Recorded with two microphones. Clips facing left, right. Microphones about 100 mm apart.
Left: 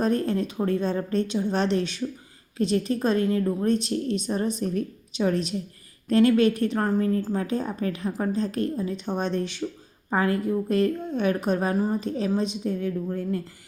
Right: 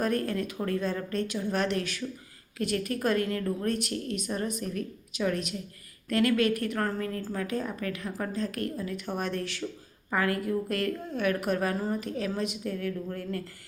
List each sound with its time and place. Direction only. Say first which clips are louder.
0.0 s a woman's voice: left 5 dB; 25° left (ahead or behind)